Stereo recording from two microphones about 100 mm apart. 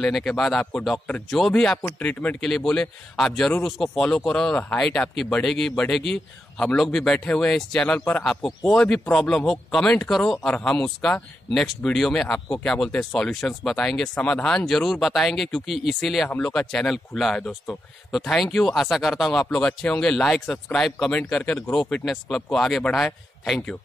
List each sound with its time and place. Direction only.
0.0 s speech: 5° left (ahead or behind)
0.9 s speech: 15° left (ahead or behind)
2.4 s speech: 5° left (ahead or behind)